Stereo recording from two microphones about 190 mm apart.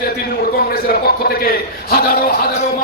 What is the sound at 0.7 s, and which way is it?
A man's voice, 55° left (ahead or behind).